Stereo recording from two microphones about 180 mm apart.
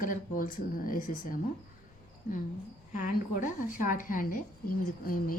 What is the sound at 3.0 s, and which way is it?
Speech, 50° left (ahead or behind).